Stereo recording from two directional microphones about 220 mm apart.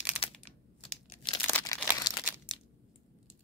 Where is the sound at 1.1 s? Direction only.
20° left (ahead or behind).